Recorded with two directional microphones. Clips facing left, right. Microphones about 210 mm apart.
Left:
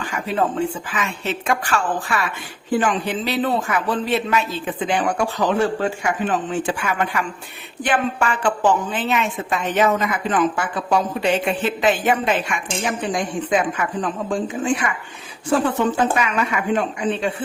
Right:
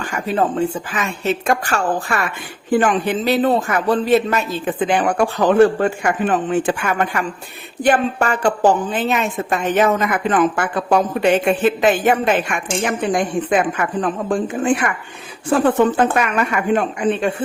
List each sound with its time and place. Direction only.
0.9 s a woman's voice: 45° right (ahead or behind)